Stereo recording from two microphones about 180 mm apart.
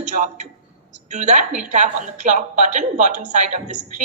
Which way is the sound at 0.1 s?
40° right (ahead or behind).